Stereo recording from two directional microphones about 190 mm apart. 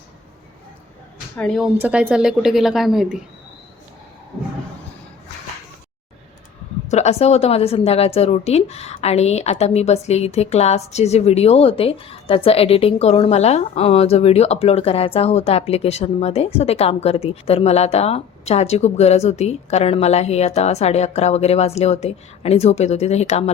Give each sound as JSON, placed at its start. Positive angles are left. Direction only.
{"t": 1.4, "sound": "a woman's voice", "side_deg": 5}
{"t": 6.8, "sound": "a woman's voice", "side_deg": 35}